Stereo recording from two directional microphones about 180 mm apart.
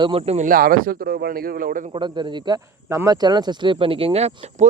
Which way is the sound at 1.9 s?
25° right (ahead or behind).